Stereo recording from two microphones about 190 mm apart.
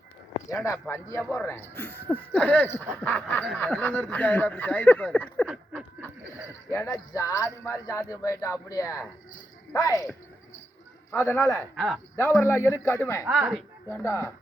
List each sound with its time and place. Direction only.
0.3 s speech: 15° left (ahead or behind)
6.7 s speech: 15° left (ahead or behind)
11.1 s speech: 10° left (ahead or behind)
13.2 s speech: 5° right (ahead or behind)
13.8 s speech: 15° left (ahead or behind)